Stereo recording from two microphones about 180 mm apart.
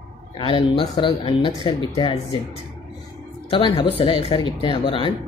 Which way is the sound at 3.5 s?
25° left (ahead or behind).